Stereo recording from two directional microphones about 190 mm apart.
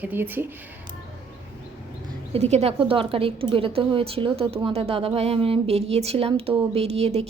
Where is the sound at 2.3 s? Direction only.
35° right (ahead or behind).